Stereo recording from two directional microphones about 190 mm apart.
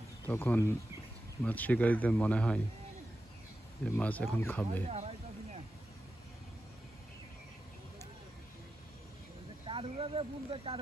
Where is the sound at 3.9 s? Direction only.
10° left (ahead or behind).